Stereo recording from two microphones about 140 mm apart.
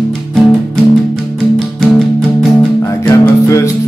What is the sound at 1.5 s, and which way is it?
Music, centre (ahead or behind).